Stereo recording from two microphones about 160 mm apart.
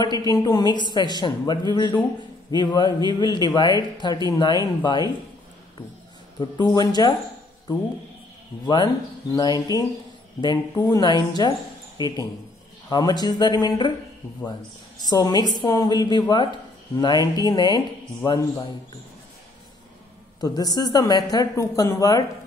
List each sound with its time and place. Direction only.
0.0 s speech: 25° left (ahead or behind)
6.4 s speech: 25° left (ahead or behind)
8.6 s speech: 25° left (ahead or behind)
15.0 s speech: 25° left (ahead or behind)
20.3 s speech: 25° left (ahead or behind)